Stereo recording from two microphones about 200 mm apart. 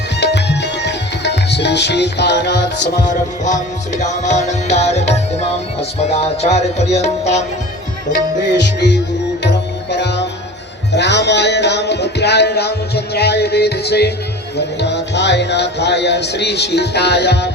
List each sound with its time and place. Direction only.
0.2 s music: 60° left (ahead or behind)
3.4 s music: 35° left (ahead or behind)
9.4 s music: 60° left (ahead or behind)